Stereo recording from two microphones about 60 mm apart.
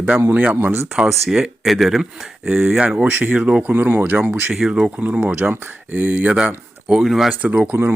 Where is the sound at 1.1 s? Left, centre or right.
Centre; by 3.4 s right.